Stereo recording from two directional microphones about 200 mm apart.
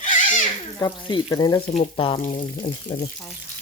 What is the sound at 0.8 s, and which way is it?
Speech, 20° left (ahead or behind).